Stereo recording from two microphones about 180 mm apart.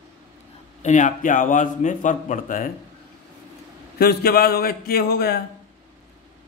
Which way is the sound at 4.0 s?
60° left (ahead or behind).